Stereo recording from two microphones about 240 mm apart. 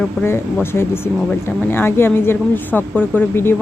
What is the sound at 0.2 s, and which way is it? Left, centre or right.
Speech, centre.